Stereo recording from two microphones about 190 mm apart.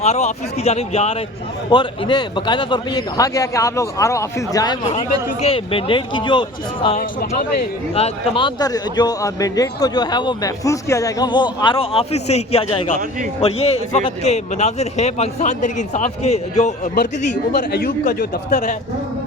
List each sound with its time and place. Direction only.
0.0 s a man's voice: 35° left (ahead or behind)
1.7 s a man's voice: 25° left (ahead or behind)
4.9 s a man's voice: 30° left (ahead or behind)
6.9 s a man's voice: 45° left (ahead or behind)
7.9 s a man's voice: 30° left (ahead or behind)
17.6 s a man's voice: 50° left (ahead or behind)